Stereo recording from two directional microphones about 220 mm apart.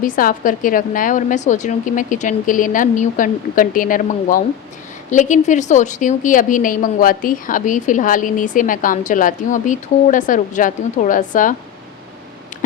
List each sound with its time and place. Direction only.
0.0 s a woman's voice: 40° left (ahead or behind)